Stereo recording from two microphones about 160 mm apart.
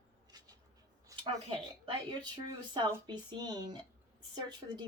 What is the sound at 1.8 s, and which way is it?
Speech, 25° right (ahead or behind).